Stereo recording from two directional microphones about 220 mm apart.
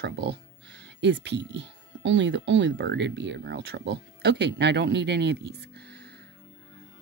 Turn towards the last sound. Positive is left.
turn(degrees=-50)  # may be behind; listen again after turning